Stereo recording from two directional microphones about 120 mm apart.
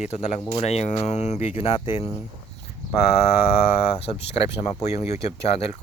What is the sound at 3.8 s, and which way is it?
Speech, 60° left (ahead or behind).